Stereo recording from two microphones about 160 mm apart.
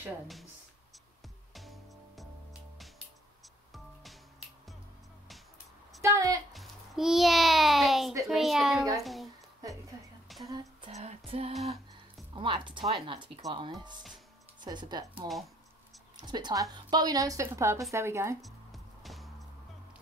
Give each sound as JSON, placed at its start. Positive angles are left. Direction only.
{"t": 1.5, "sound": "music", "side_deg": 0}
{"t": 3.7, "sound": "music", "side_deg": 0}
{"t": 6.0, "sound": "a sound", "side_deg": -20}
{"t": 6.5, "sound": "music", "side_deg": 0}
{"t": 8.3, "sound": "a child's voice", "side_deg": 0}
{"t": 9.0, "sound": "a sound", "side_deg": 0}
{"t": 10.5, "sound": "a sound", "side_deg": -20}
{"t": 10.9, "sound": "female singing", "side_deg": -45}
{"t": 12.4, "sound": "a woman's voice", "side_deg": -30}
{"t": 15.1, "sound": "a child's voice", "side_deg": 0}
{"t": 16.2, "sound": "a woman's voice", "side_deg": -25}
{"t": 18.4, "sound": "music", "side_deg": 0}